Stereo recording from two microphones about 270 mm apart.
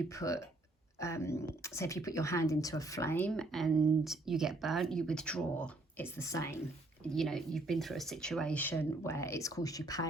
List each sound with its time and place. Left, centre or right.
0.1 s speech: centre